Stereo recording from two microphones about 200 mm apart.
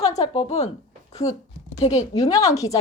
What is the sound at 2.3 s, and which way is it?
Speech, 15° left (ahead or behind).